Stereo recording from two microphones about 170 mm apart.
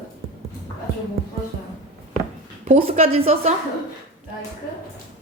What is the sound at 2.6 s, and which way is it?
Speech, 40° right (ahead or behind).